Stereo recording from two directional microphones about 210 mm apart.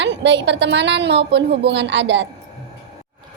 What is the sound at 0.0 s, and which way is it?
A woman's voice, 55° right (ahead or behind).